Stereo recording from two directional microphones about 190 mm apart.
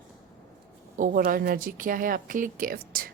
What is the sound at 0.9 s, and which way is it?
A woman's voice, 45° right (ahead or behind).